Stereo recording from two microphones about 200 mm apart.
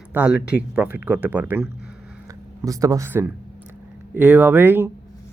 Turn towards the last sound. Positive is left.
turn(degrees=-10)  # may be behind; listen again after turning